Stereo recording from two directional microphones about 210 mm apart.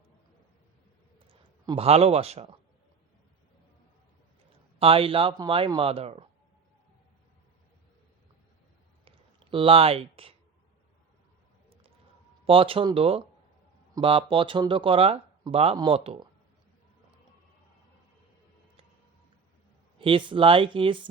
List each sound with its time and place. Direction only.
1.3 s speech: 25° right (ahead or behind)
4.8 s speech: 25° right (ahead or behind)
9.0 s a sound: 25° right (ahead or behind)
12.5 s speech: 25° right (ahead or behind)
20.0 s speech: 25° right (ahead or behind)